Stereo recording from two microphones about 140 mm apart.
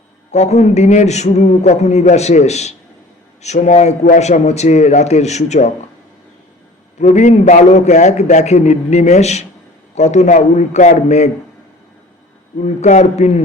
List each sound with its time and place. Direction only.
0.3 s a man's voice: 55° left (ahead or behind)
7.0 s a man's voice: 55° left (ahead or behind)
12.6 s a man's voice: 55° left (ahead or behind)